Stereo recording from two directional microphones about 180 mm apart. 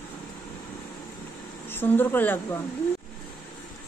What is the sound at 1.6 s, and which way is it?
Speech, 10° left (ahead or behind).